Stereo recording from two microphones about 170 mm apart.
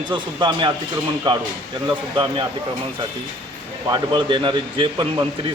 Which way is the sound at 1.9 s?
25° right (ahead or behind).